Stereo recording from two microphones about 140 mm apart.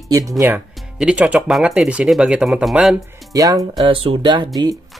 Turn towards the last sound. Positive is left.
turn(degrees=-35)  # may be behind; listen again after turning